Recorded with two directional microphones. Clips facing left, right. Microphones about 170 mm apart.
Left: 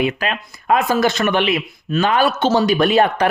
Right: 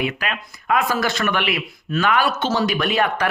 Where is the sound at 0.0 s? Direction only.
30° left (ahead or behind).